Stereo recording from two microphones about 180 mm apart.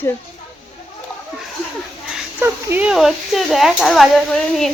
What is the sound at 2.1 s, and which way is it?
A woman's voice, 10° right (ahead or behind).